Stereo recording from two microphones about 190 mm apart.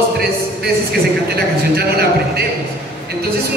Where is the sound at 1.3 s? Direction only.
55° right (ahead or behind).